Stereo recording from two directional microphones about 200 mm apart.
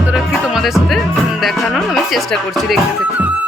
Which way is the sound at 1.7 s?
Centre (ahead or behind).